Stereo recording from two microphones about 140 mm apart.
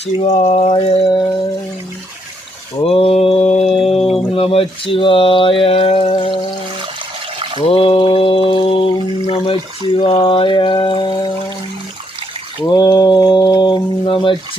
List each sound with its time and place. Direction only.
0.2 s a sound: 55° left (ahead or behind)
2.8 s mantra: 45° left (ahead or behind)
3.9 s a sound: centre (ahead or behind)
4.4 s speech: 45° left (ahead or behind)
7.6 s mantra: 40° left (ahead or behind)
9.2 s speech: 45° left (ahead or behind)
12.6 s mantra: 30° left (ahead or behind)